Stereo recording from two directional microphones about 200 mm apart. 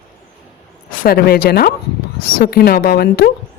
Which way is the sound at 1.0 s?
50° left (ahead or behind).